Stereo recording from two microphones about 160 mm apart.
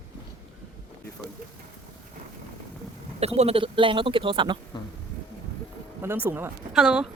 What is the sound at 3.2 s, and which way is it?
A man's voice, 40° right (ahead or behind).